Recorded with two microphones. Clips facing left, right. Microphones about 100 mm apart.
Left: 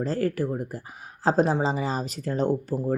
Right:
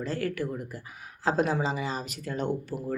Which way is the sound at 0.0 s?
35° left (ahead or behind).